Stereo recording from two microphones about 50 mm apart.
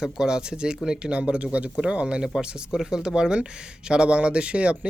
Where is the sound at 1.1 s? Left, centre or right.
Right.